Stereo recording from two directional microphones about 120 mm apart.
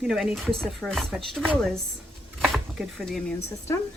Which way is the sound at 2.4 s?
Centre (ahead or behind).